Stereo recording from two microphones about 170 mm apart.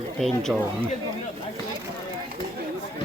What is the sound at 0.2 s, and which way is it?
Speech, 5° left (ahead or behind).